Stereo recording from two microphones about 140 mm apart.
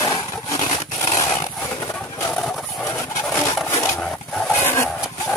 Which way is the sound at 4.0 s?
5° left (ahead or behind).